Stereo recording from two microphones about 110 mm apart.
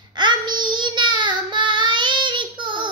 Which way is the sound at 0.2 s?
45° right (ahead or behind).